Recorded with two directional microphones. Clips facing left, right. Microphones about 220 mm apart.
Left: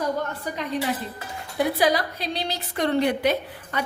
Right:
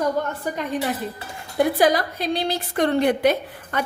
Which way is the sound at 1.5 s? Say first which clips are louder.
Right 3 dB; 50° right (ahead or behind).